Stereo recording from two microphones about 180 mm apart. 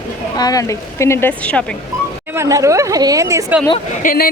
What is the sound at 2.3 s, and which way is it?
Speech, 15° right (ahead or behind).